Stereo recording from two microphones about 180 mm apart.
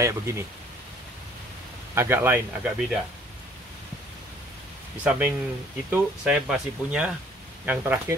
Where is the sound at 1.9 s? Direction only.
10° right (ahead or behind).